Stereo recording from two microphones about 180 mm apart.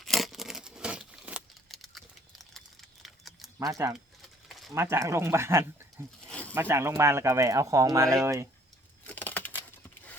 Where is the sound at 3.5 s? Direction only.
15° right (ahead or behind).